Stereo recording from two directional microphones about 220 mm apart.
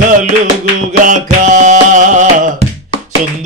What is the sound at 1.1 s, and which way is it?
Music, 35° right (ahead or behind).